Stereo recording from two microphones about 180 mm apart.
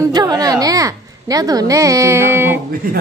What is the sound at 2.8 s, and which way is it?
Speech, 50° right (ahead or behind).